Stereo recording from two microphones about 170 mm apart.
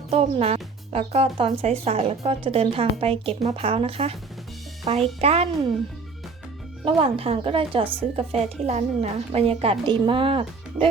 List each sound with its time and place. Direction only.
0.1 s speech: 35° right (ahead or behind)
6.8 s speech: 35° right (ahead or behind)